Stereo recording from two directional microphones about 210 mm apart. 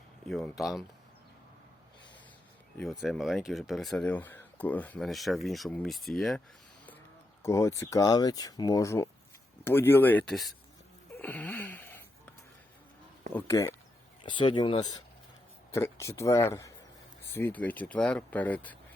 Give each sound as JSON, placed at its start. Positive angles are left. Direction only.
{"t": 0.3, "sound": "speech", "side_deg": 0}
{"t": 2.7, "sound": "speech", "side_deg": 0}
{"t": 7.4, "sound": "speech", "side_deg": 15}
{"t": 11.2, "sound": "wheeze", "side_deg": 5}
{"t": 13.3, "sound": "speech", "side_deg": 10}
{"t": 14.3, "sound": "speech", "side_deg": 20}